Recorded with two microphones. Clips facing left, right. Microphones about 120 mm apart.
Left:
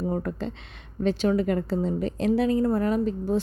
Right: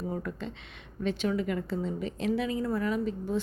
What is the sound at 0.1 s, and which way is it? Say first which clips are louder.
Speech: left 6 dB; 40° left (ahead or behind).